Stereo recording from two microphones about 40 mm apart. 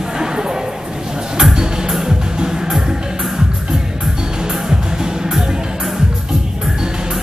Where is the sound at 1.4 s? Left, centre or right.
Centre.